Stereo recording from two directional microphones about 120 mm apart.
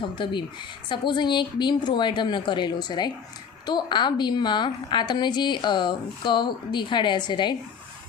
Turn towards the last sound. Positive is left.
turn(degrees=40)  # may be behind; listen again after turning